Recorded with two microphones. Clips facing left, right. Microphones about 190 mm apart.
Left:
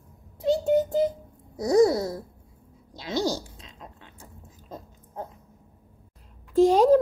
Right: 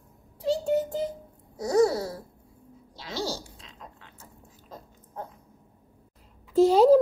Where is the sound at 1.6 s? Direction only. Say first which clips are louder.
Left 3 dB; 15° left (ahead or behind).